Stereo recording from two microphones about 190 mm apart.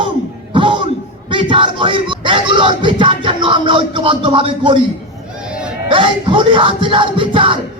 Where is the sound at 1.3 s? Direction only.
25° right (ahead or behind).